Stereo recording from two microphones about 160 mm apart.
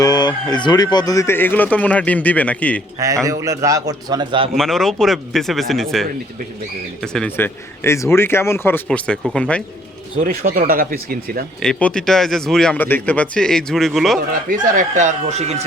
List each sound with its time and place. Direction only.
0.0 s speech: 25° left (ahead or behind); by 2.8 s 10° left (ahead or behind)
3.2 s a man's voice: 20° right (ahead or behind)
4.5 s speech: centre (ahead or behind)
10.2 s speech: 60° right (ahead or behind)
11.6 s speech: 5° left (ahead or behind)
14.5 s speech: 50° right (ahead or behind)